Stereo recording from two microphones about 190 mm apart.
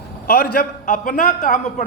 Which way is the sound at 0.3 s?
50° left (ahead or behind).